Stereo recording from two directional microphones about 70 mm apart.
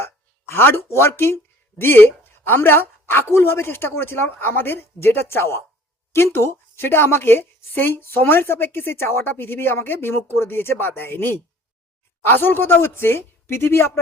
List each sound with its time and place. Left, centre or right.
0.0 s a woman's voice: left